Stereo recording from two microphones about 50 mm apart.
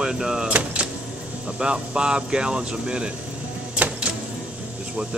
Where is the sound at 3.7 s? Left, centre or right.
Right.